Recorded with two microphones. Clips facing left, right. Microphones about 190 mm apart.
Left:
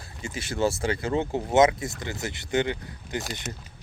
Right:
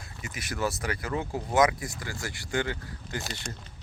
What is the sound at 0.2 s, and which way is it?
Speech, 30° left (ahead or behind).